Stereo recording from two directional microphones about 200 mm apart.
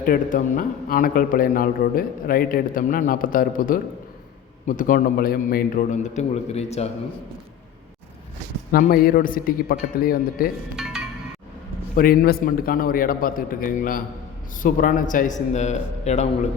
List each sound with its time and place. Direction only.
0.0 s a man's voice: 45° left (ahead or behind)
8.7 s a man's voice: 50° left (ahead or behind)
10.8 s music: 5° right (ahead or behind)
11.9 s a man's voice: 45° left (ahead or behind)